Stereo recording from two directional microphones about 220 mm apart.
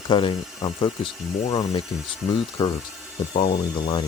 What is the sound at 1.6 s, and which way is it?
Speech, 20° left (ahead or behind).